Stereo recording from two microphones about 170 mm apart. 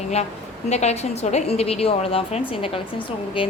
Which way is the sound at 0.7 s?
40° left (ahead or behind).